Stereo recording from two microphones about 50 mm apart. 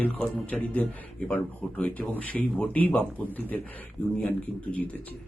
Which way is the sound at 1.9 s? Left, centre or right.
Left.